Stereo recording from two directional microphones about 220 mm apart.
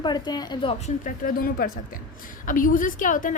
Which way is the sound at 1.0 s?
40° left (ahead or behind).